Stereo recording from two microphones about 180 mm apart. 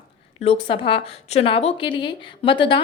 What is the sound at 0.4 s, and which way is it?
A woman's voice, 30° left (ahead or behind).